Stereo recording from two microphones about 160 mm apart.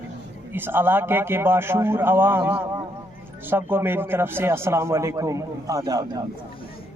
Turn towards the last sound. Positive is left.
turn(degrees=-25)  # may be behind; listen again after turning